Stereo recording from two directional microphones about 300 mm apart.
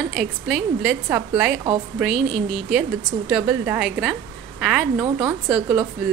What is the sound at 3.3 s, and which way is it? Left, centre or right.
A woman's voice, centre.